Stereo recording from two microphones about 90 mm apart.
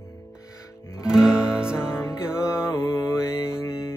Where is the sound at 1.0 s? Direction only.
10° right (ahead or behind).